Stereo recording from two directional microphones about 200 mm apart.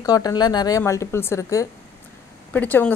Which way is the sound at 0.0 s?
20° left (ahead or behind).